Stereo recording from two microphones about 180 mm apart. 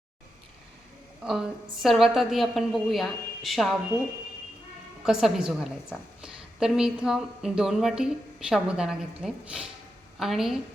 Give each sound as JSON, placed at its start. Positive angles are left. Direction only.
{"t": 1.2, "sound": "a woman's voice", "side_deg": 0}
{"t": 5.0, "sound": "a woman's voice", "side_deg": 0}